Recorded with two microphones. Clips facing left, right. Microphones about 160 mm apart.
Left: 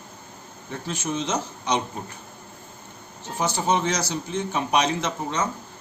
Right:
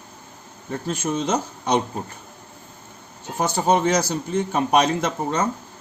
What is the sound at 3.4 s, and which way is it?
A man's voice, 55° right (ahead or behind).